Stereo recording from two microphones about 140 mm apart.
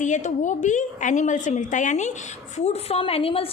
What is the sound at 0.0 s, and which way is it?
A woman's voice, 60° left (ahead or behind).